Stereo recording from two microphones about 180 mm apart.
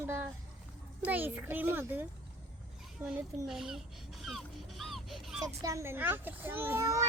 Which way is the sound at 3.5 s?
Centre (ahead or behind).